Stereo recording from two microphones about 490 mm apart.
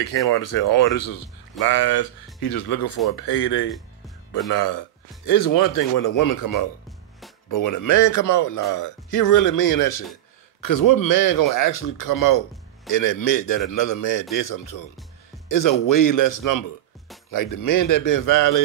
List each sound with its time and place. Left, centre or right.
0.3 s speech: left
15.6 s speech: left